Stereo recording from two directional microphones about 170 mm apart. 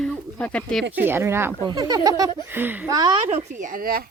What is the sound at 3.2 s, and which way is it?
Speech, 40° right (ahead or behind).